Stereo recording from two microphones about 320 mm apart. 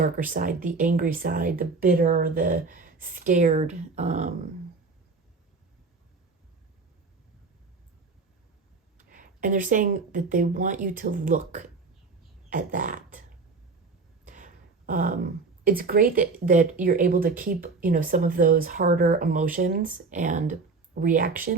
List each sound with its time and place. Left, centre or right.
0.0 s speech: right
9.0 s speech: right
12.5 s a sound: right
14.3 s speech: right